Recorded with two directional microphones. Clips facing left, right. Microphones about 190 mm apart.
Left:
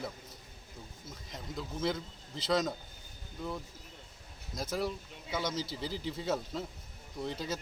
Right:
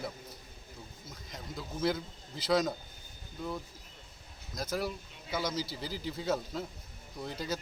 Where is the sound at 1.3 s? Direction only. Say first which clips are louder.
Left 1 dB; centre (ahead or behind).